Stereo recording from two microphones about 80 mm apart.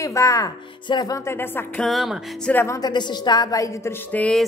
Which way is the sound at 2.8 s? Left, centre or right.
Left.